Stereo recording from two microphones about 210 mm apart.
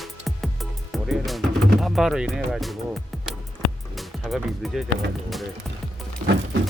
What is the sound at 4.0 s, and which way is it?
Speech, centre (ahead or behind).